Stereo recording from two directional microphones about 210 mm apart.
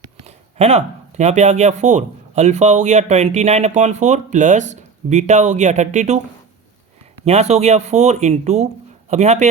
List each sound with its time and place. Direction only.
0.3 s speech: 30° right (ahead or behind)
7.3 s speech: 30° right (ahead or behind)